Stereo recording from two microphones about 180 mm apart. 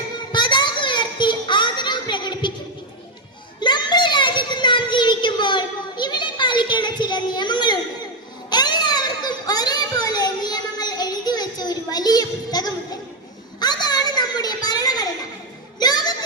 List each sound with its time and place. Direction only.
0.3 s children playing: 25° left (ahead or behind)
3.6 s child singing: 25° left (ahead or behind)
8.4 s children playing: 25° left (ahead or behind)
13.6 s a sound: 20° left (ahead or behind)